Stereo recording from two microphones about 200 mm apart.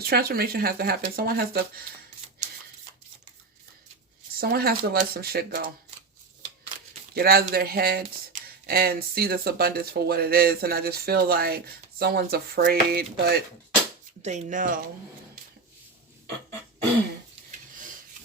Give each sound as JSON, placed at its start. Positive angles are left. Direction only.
{"t": 0.0, "sound": "speech", "side_deg": -50}
{"t": 4.4, "sound": "speech", "side_deg": -50}
{"t": 7.1, "sound": "speech", "side_deg": -50}
{"t": 14.2, "sound": "speech", "side_deg": -35}